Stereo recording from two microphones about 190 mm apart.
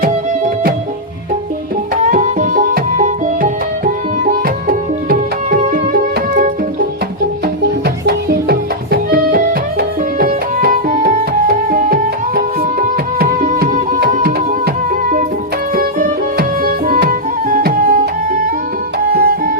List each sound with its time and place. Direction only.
2.0 s music: 45° right (ahead or behind)
7.4 s music: 60° right (ahead or behind)
15.7 s music: 50° right (ahead or behind)